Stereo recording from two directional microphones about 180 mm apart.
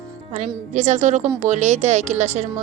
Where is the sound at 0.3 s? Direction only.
40° right (ahead or behind).